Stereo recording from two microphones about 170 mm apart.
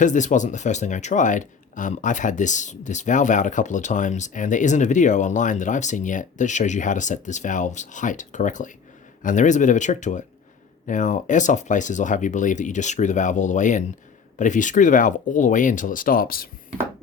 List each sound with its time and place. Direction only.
0.0 s speech: 45° left (ahead or behind)